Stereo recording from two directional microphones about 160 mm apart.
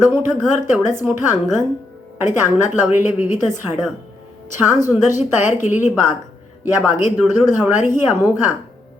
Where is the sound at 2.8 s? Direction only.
15° right (ahead or behind).